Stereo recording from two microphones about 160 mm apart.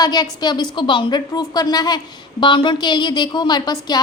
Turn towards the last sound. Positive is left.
turn(degrees=25)  # may be behind; listen again after turning